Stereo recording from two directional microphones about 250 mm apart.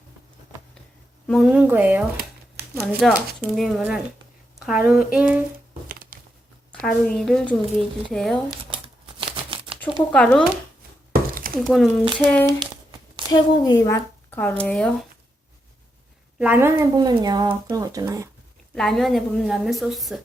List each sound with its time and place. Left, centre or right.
1.3 s a woman's voice: centre
5.9 s a sound: right
6.8 s a woman's voice: centre
10.1 s a woman's voice: centre
11.1 s chopping: right
11.6 s a woman's voice: centre
16.4 s speech: centre
18.7 s a woman's voice: centre